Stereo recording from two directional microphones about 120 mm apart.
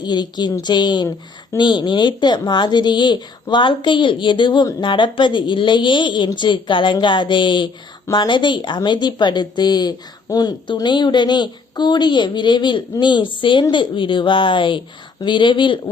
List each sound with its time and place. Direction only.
0.0 s a woman's voice: 35° left (ahead or behind)